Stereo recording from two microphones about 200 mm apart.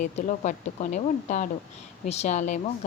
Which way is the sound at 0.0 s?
40° left (ahead or behind).